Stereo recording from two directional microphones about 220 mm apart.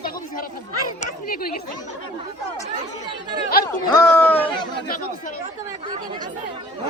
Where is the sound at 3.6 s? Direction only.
15° left (ahead or behind).